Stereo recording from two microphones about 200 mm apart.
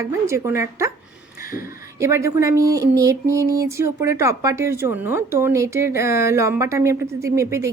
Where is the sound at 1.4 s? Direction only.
45° left (ahead or behind).